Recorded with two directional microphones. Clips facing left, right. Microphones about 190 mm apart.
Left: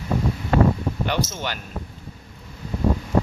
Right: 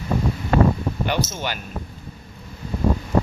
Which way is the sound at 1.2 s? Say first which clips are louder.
Right 2 dB; 10° left (ahead or behind).